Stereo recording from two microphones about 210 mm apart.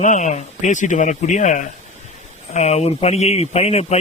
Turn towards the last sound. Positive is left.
turn(degrees=30)  # may be behind; listen again after turning